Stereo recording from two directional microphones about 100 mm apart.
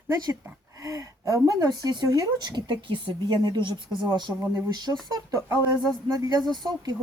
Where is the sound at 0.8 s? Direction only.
35° right (ahead or behind).